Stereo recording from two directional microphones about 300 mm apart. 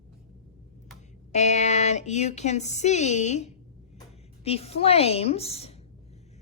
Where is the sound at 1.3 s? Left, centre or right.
Left.